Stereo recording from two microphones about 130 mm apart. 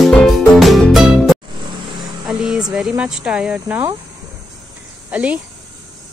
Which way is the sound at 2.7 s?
5° right (ahead or behind).